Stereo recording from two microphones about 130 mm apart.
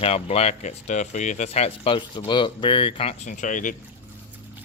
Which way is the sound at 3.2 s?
75° left (ahead or behind).